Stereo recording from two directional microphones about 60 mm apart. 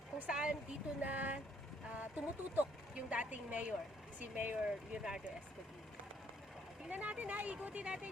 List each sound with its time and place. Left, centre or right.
0.3 s speech: centre
4.6 s speech: centre
6.9 s speech: right